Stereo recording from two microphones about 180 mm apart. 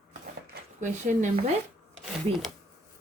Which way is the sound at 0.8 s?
40° right (ahead or behind).